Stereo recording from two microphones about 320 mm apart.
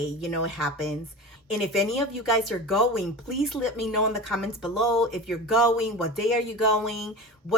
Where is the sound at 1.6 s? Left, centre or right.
Centre.